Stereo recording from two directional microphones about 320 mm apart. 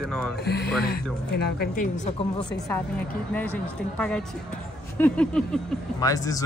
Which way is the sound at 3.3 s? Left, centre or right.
Centre.